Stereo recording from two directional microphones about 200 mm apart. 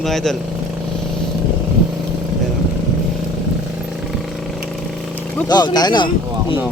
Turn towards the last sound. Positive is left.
turn(degrees=25)  # may be behind; listen again after turning